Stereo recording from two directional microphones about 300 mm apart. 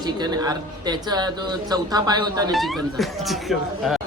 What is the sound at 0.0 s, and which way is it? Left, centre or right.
Speech, centre.